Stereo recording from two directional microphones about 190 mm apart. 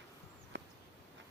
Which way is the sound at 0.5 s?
65° right (ahead or behind).